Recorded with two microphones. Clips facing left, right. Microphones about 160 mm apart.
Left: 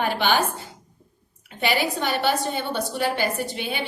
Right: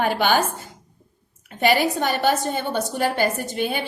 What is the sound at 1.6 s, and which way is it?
A woman's voice, 45° right (ahead or behind).